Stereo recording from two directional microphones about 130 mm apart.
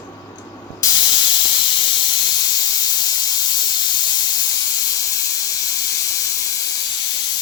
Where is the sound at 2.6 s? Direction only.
30° left (ahead or behind).